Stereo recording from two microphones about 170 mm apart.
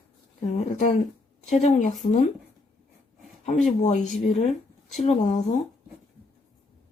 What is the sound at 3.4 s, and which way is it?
Speech, 45° left (ahead or behind).